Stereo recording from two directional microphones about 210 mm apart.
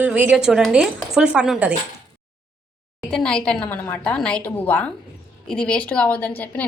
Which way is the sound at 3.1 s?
5° left (ahead or behind).